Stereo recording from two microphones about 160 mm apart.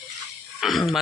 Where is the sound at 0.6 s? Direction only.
Centre (ahead or behind).